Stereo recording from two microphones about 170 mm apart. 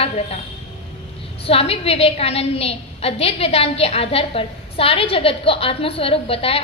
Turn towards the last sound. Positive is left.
turn(degrees=35)  # may be behind; listen again after turning